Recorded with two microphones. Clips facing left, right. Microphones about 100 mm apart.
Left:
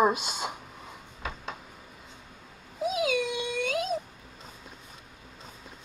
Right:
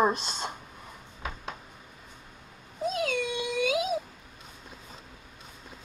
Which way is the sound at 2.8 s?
5° left (ahead or behind).